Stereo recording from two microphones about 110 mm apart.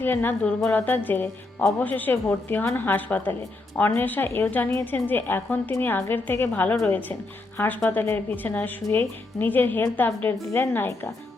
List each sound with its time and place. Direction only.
0.0 s a woman's voice: 20° left (ahead or behind)